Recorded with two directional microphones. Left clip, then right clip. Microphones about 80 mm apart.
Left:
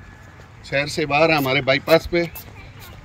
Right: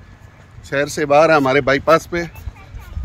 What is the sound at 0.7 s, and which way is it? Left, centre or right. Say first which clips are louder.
Speech: right 5 dB; right.